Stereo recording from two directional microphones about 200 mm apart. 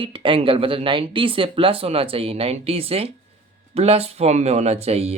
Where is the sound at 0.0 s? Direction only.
25° right (ahead or behind).